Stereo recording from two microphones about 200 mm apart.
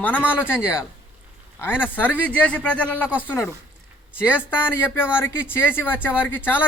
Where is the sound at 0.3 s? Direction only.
10° left (ahead or behind).